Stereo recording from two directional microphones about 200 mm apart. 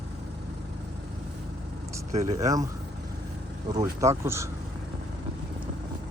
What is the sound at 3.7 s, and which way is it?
Speech, 15° right (ahead or behind).